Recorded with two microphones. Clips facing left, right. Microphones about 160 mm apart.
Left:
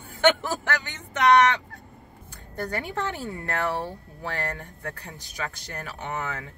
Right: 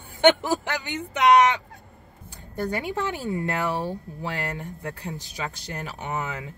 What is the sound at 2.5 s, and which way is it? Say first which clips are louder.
Speech: right 3 dB; 15° right (ahead or behind).